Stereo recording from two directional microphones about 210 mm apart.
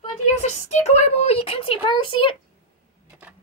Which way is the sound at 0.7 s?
30° left (ahead or behind).